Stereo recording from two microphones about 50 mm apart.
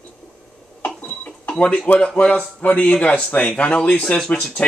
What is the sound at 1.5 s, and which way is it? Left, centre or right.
Speech, left.